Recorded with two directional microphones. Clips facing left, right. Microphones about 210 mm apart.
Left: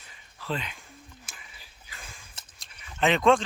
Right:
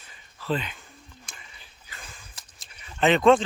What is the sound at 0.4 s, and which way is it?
Speech, centre (ahead or behind).